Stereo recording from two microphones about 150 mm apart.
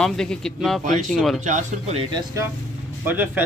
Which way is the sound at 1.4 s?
50° right (ahead or behind).